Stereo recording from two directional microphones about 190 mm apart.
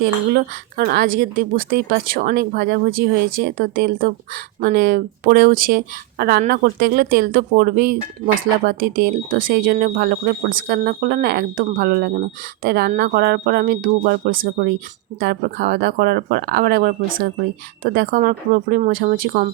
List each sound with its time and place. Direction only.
0.0 s speech: 55° right (ahead or behind)